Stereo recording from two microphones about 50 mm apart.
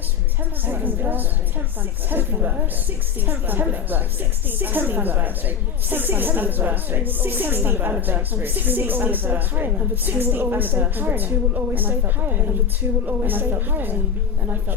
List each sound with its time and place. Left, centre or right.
0.6 s a woman's voice: right